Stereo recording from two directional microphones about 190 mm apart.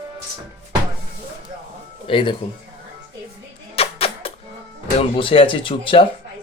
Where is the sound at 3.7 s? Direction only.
30° left (ahead or behind).